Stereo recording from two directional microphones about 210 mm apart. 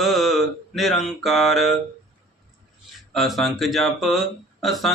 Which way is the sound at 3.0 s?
Centre (ahead or behind).